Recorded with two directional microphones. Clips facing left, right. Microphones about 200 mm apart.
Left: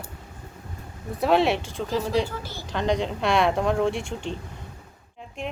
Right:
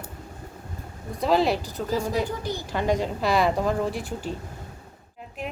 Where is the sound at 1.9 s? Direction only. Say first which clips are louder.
Left 1 dB; 10° right (ahead or behind).